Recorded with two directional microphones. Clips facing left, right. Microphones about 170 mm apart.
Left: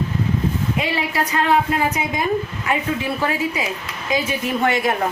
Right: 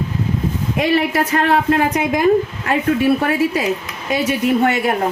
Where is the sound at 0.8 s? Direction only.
65° right (ahead or behind).